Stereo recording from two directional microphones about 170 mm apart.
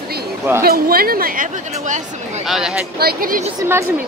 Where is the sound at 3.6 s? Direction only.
15° right (ahead or behind).